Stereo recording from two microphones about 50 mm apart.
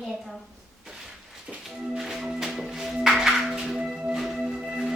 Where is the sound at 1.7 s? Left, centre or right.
Right.